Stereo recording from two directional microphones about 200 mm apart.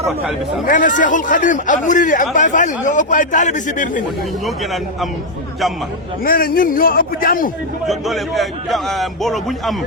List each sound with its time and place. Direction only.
0.6 s a man's voice: 40° left (ahead or behind)
4.4 s a man's voice: centre (ahead or behind)
6.2 s a man's voice: 45° left (ahead or behind)
7.9 s a man's voice: centre (ahead or behind)